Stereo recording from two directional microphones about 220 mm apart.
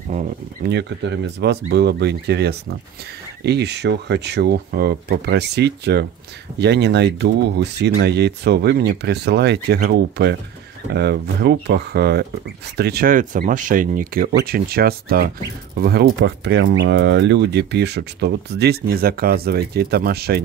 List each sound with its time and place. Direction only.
0.7 s speech: 50° right (ahead or behind)